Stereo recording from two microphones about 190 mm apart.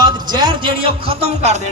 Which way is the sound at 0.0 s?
20° right (ahead or behind).